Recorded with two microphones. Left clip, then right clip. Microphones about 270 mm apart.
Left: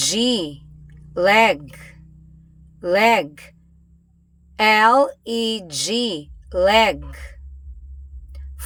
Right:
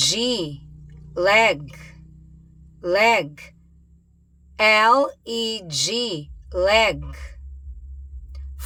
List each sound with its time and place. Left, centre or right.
0.0 s a sound: centre
2.7 s speech: centre
4.5 s speech: centre